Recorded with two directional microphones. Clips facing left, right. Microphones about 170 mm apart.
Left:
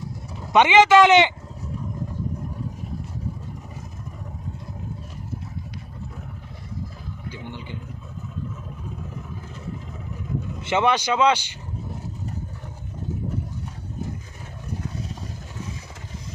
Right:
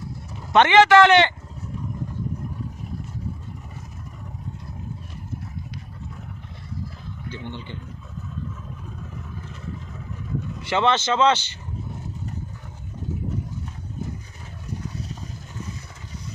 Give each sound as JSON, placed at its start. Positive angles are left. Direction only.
{"t": 0.5, "sound": "speech", "side_deg": 15}
{"t": 7.2, "sound": "speech", "side_deg": 5}
{"t": 10.6, "sound": "speech", "side_deg": 20}